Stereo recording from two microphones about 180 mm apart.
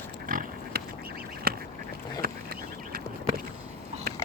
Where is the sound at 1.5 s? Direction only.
55° right (ahead or behind).